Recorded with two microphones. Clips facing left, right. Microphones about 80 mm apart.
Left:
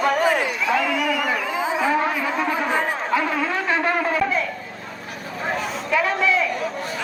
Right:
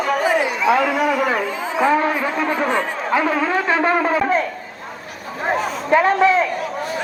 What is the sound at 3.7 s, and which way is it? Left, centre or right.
Shofar, right.